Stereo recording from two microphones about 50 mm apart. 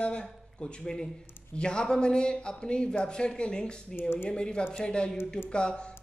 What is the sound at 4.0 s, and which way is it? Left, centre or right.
Speech, left.